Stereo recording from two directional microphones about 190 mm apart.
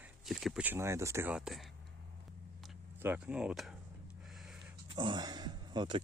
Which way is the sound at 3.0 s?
10° right (ahead or behind).